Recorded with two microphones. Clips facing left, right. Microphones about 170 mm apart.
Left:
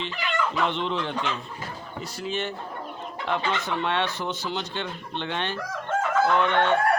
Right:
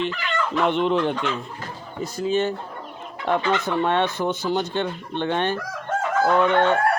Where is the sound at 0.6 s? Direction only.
50° right (ahead or behind).